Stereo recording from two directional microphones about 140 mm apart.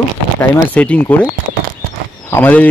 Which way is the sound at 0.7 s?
10° left (ahead or behind).